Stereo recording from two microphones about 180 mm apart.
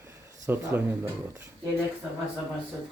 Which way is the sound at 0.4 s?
15° right (ahead or behind).